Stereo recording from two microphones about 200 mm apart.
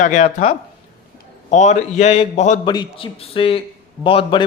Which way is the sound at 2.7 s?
25° left (ahead or behind).